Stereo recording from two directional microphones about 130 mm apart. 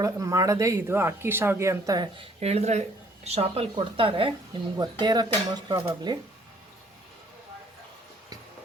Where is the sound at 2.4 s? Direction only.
55° right (ahead or behind); by 6.2 s 35° right (ahead or behind).